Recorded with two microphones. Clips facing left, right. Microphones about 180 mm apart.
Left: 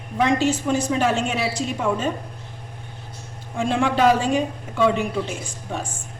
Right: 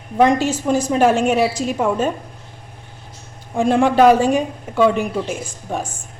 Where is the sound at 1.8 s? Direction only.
45° right (ahead or behind).